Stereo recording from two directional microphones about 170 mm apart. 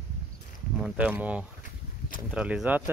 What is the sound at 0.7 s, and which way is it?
Speech, 5° right (ahead or behind).